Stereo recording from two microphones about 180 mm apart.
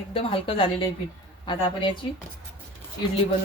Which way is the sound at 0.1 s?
30° left (ahead or behind).